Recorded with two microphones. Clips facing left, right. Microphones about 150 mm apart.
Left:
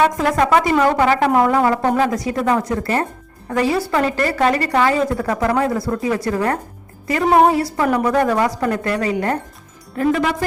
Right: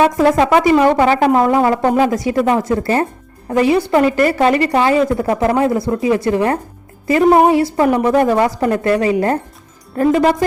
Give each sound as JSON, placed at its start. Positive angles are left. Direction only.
{"t": 0.2, "sound": "speech", "side_deg": -25}
{"t": 1.8, "sound": "speech", "side_deg": -10}
{"t": 2.0, "sound": "speech", "side_deg": -25}